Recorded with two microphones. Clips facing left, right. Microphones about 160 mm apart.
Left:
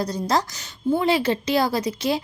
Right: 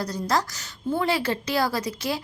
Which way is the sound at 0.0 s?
20° left (ahead or behind).